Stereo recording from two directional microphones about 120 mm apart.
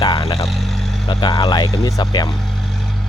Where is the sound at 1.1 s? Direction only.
35° left (ahead or behind).